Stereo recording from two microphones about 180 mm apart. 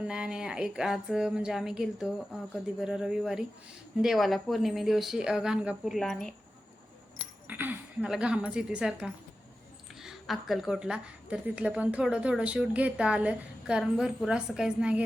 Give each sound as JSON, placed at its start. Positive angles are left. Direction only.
{"t": 0.0, "sound": "a woman's voice", "side_deg": -5}
{"t": 7.4, "sound": "a woman's voice", "side_deg": -10}